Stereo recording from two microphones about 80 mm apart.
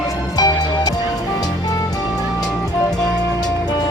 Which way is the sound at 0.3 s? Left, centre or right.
Left.